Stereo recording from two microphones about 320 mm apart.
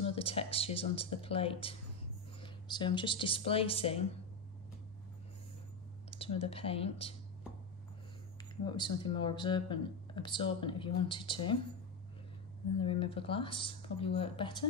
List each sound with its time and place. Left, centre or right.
0.0 s speech: centre
6.0 s speech: centre
8.6 s speech: centre
12.7 s speech: centre